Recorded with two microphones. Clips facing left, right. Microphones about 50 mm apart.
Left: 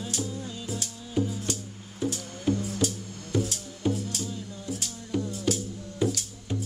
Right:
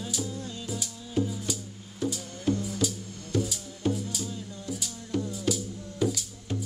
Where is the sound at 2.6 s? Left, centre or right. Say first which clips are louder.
Left 1 dB; left.